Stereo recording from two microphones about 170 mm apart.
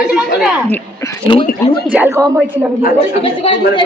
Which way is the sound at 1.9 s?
15° right (ahead or behind).